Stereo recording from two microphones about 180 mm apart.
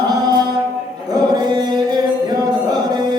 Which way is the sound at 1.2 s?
20° right (ahead or behind).